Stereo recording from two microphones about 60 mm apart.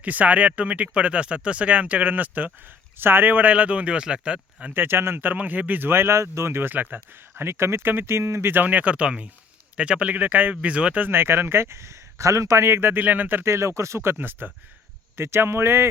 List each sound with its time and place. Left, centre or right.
0.0 s speech: right
4.7 s speech: right
5.3 s speech: right
8.5 s speech: right
11.1 s speech: right
13.4 s speech: right